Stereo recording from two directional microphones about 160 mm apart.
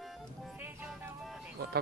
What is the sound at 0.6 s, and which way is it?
Music, 10° right (ahead or behind).